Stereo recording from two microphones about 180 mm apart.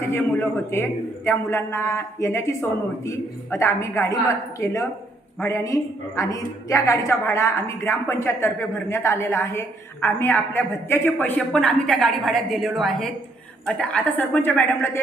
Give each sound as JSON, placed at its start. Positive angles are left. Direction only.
{"t": 0.1, "sound": "a woman's voice", "side_deg": 10}